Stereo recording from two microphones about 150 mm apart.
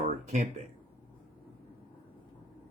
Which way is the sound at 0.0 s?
55° right (ahead or behind).